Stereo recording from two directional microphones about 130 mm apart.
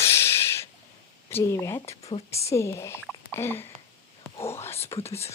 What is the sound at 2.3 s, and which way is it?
Speech, 20° left (ahead or behind).